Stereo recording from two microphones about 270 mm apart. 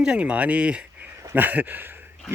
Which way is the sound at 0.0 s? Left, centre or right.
Centre.